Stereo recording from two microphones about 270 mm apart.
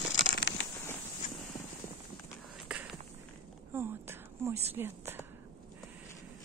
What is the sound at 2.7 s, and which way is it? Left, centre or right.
Walk, centre.